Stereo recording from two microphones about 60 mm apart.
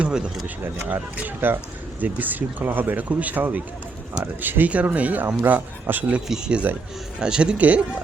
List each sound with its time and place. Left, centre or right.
0.0 s speech: centre
5.2 s speech: right
7.2 s speech: centre
7.6 s speech: right